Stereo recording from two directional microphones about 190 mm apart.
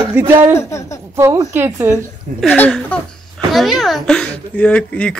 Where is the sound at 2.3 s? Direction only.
10° left (ahead or behind).